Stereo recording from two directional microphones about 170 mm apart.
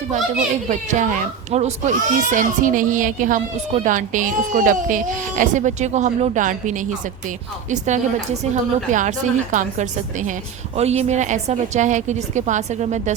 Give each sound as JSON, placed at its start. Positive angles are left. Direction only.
{"t": 0.7, "sound": "speech", "side_deg": -45}